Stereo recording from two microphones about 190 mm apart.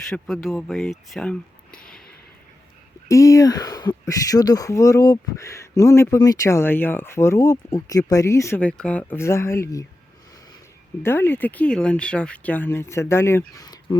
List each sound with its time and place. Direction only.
0.1 s speech: centre (ahead or behind)
3.1 s speech: 15° left (ahead or behind)
11.0 s speech: 10° left (ahead or behind)